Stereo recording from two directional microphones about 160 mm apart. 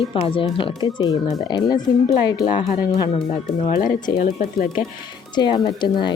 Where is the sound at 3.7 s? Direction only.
60° left (ahead or behind).